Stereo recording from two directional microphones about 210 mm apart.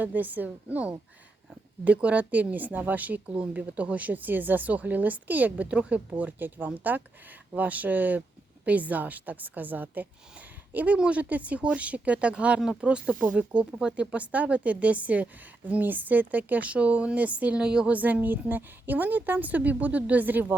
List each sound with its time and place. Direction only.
0.0 s speech: 10° right (ahead or behind)